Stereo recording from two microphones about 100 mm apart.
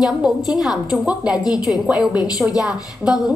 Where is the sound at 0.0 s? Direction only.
5° right (ahead or behind).